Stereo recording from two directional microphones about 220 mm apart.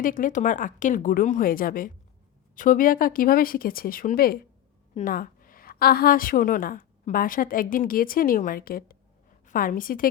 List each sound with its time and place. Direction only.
0.0 s a woman's voice: 40° left (ahead or behind)